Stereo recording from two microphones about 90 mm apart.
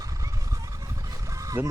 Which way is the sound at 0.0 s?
40° right (ahead or behind).